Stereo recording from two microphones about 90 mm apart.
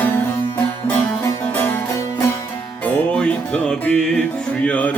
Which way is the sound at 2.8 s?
15° left (ahead or behind).